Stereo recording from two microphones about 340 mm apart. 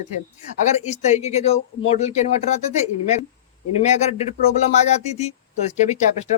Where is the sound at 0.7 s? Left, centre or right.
Centre.